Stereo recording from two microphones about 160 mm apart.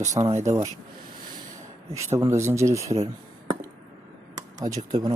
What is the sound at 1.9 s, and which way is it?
Speech, 15° right (ahead or behind).